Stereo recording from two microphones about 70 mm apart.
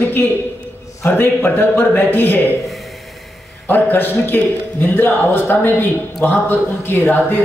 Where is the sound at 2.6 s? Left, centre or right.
Centre.